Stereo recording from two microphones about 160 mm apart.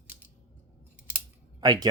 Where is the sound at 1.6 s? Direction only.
25° right (ahead or behind).